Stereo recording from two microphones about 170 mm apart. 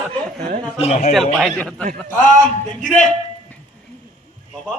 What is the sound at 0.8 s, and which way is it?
Speech, 40° left (ahead or behind).